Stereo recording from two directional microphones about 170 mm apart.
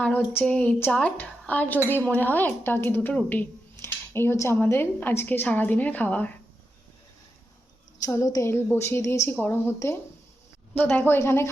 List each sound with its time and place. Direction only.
0.3 s a woman's voice: 5° left (ahead or behind)
8.0 s a woman's voice: 20° left (ahead or behind)